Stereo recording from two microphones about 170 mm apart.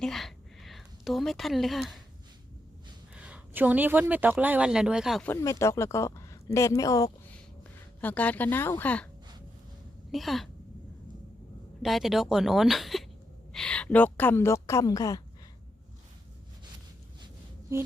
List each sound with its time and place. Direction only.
0.0 s a sound: centre (ahead or behind)
3.2 s speech: 5° right (ahead or behind)
5.2 s a woman's voice: 15° left (ahead or behind)
8.0 s a woman's voice: 10° left (ahead or behind)
10.1 s speech: centre (ahead or behind)
11.8 s a woman's voice: centre (ahead or behind); by 15.2 s 20° left (ahead or behind)
17.7 s a sound: 15° right (ahead or behind)